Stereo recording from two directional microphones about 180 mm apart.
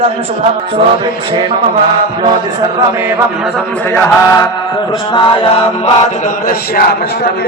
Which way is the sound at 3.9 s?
15° left (ahead or behind).